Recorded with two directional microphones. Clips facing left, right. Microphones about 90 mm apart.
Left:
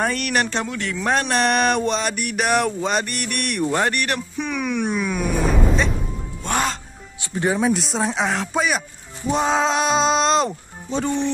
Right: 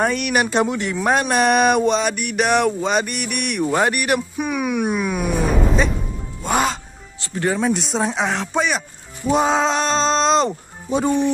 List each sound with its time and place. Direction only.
0.0 s speech: centre (ahead or behind)
1.1 s a sound: 5° right (ahead or behind)
6.4 s music: 5° right (ahead or behind)
7.2 s speech: 15° left (ahead or behind)
7.6 s a sound: centre (ahead or behind)
10.9 s speech: 10° right (ahead or behind)